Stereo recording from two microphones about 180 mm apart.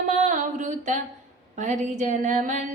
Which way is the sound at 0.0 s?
45° right (ahead or behind).